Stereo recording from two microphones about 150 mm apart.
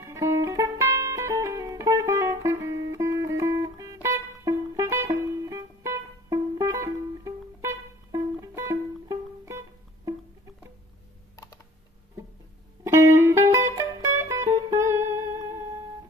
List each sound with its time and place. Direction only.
0.0 s music: 20° right (ahead or behind)
12.8 s music: 20° right (ahead or behind)